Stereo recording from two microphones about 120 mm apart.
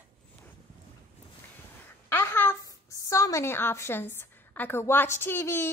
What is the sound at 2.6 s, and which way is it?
A woman's voice, 30° left (ahead or behind).